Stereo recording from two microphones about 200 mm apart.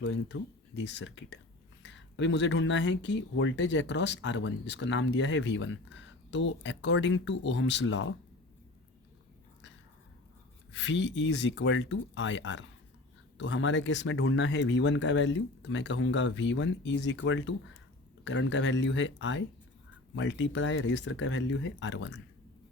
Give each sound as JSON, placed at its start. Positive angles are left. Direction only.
{"t": 0.0, "sound": "speech", "side_deg": 65}
{"t": 10.7, "sound": "speech", "side_deg": 65}